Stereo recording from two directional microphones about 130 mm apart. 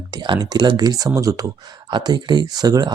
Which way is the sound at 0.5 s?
35° right (ahead or behind).